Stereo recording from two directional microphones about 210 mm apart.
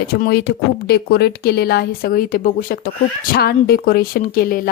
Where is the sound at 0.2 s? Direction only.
50° left (ahead or behind).